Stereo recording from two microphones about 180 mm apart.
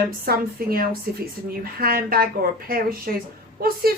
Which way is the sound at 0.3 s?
55° right (ahead or behind).